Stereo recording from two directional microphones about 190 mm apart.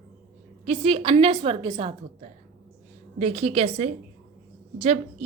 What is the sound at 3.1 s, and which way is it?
A woman's voice, 35° right (ahead or behind).